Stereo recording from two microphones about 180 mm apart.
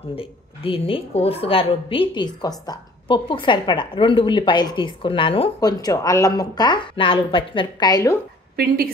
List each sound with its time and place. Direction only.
0.1 s a woman's voice: 30° left (ahead or behind)
8.5 s a woman's voice: 60° right (ahead or behind)